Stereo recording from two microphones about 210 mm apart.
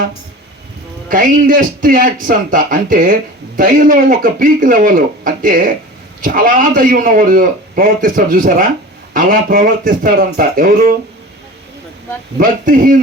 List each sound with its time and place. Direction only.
1.0 s a man's voice: 40° right (ahead or behind)
12.4 s a man's voice: 40° right (ahead or behind)